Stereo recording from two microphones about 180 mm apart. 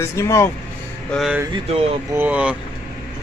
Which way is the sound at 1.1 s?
Centre (ahead or behind).